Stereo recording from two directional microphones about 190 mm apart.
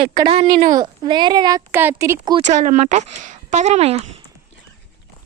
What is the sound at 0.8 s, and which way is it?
Speech, 25° right (ahead or behind).